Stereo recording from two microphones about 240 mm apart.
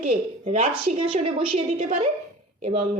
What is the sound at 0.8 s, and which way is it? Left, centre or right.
A woman's voice, right.